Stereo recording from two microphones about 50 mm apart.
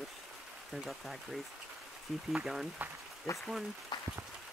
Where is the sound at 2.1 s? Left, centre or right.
Centre.